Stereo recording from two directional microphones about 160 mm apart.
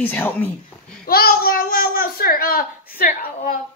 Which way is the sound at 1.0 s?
70° left (ahead or behind).